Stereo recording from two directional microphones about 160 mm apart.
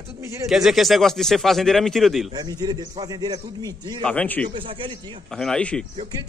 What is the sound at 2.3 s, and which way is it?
A man's voice, 25° right (ahead or behind).